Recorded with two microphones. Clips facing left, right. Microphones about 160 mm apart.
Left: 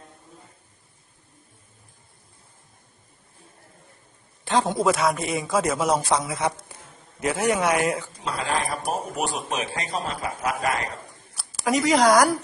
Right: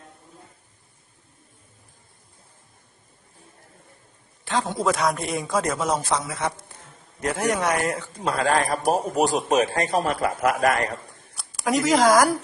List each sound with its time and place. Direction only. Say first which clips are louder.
4.4 s a man's voice: left 3 dB; 25° left (ahead or behind)
4.8 s a woman's voice: left 1 dB; 5° left (ahead or behind)
8.2 s a man's voice: right 7 dB; 50° right (ahead or behind)
11.3 s speech: even; centre (ahead or behind)